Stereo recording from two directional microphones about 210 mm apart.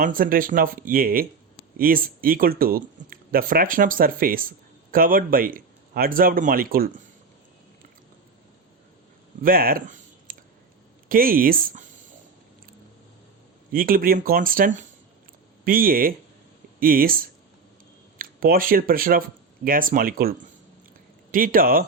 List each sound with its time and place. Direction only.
0.0 s speech: 40° right (ahead or behind)
9.4 s speech: 45° right (ahead or behind)
10.3 s a sound: 40° right (ahead or behind)
11.1 s speech: 40° right (ahead or behind)
13.7 s speech: 45° right (ahead or behind)